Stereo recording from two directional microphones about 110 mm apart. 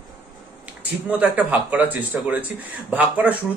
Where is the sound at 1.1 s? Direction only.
15° right (ahead or behind).